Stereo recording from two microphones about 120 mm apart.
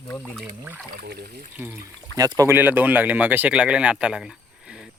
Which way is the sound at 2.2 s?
30° right (ahead or behind).